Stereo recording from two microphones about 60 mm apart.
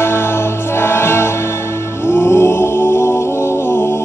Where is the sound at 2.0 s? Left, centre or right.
Left.